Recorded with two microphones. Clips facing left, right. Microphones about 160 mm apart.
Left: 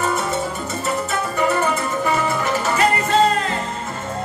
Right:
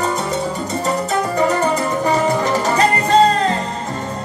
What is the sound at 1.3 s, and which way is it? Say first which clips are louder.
Music: right 2 dB; 35° right (ahead or behind).